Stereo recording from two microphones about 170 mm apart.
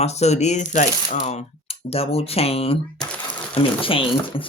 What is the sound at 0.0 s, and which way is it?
Speech, 40° left (ahead or behind).